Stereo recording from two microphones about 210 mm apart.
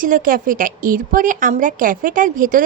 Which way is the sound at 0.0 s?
40° right (ahead or behind).